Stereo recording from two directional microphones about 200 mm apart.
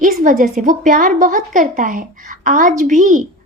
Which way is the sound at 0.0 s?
40° right (ahead or behind).